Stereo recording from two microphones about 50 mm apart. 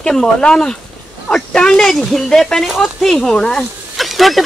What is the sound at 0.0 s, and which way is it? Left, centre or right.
Speech, centre.